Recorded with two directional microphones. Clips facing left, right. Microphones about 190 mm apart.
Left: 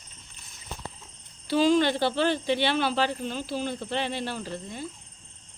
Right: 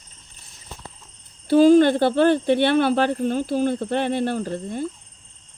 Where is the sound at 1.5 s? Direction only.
50° right (ahead or behind).